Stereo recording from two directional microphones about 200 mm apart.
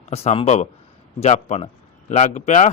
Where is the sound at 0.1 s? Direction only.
30° left (ahead or behind).